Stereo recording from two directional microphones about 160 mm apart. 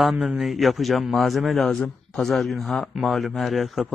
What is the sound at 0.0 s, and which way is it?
Speech, centre (ahead or behind).